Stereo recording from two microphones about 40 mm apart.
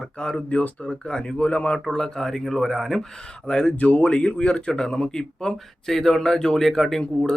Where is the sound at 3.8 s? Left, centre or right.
Left; by 7.3 s centre.